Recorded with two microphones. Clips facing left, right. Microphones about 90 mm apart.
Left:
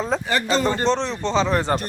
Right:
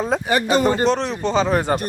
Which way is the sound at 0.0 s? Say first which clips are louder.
Right 3 dB; 15° right (ahead or behind).